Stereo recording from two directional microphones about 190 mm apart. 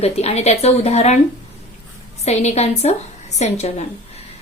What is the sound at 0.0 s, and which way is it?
Speech, 35° left (ahead or behind).